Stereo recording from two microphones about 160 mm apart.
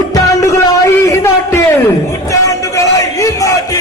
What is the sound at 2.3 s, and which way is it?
A man's voice, 20° left (ahead or behind).